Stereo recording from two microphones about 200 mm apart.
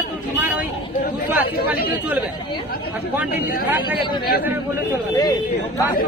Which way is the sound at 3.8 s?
25° left (ahead or behind).